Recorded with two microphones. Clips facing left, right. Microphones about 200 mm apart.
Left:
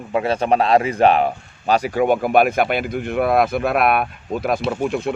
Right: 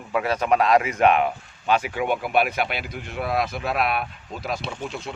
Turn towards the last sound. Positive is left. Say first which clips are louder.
# left 11 dB
turn(degrees=55)  # may be behind; listen again after turning